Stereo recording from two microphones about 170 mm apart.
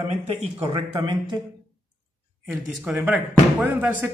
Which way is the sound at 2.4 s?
5° right (ahead or behind).